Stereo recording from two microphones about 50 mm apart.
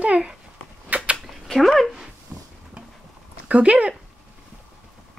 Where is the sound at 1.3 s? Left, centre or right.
Centre.